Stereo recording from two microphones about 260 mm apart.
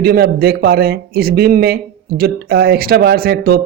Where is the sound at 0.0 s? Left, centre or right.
Right.